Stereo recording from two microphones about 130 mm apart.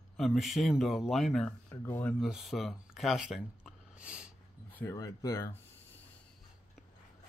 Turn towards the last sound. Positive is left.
turn(degrees=25)  # may be behind; listen again after turning